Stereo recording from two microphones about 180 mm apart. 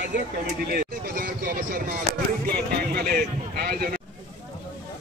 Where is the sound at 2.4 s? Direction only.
60° right (ahead or behind).